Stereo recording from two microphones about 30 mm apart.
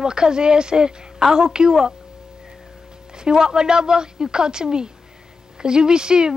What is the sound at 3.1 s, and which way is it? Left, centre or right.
Speech, right.